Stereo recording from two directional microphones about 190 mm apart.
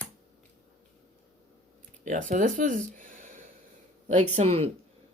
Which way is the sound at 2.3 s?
40° right (ahead or behind).